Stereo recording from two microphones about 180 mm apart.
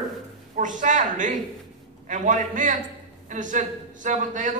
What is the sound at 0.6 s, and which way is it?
A man's voice, 45° right (ahead or behind).